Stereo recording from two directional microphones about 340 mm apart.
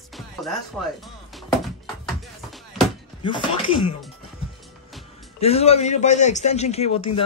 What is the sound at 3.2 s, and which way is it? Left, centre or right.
Speech, centre.